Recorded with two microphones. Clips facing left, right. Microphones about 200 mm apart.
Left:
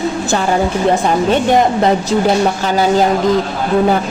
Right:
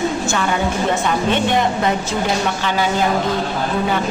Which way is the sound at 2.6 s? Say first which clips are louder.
Left 6 dB; 40° left (ahead or behind).